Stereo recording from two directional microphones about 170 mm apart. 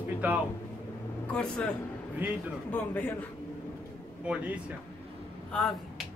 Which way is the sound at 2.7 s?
10° left (ahead or behind).